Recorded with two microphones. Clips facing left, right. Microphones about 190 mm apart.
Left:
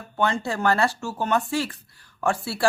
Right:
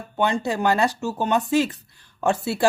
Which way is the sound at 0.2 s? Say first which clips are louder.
Right 2 dB; 15° right (ahead or behind).